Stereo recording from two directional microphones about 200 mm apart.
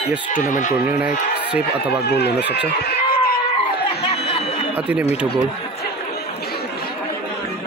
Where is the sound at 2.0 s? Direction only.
55° left (ahead or behind).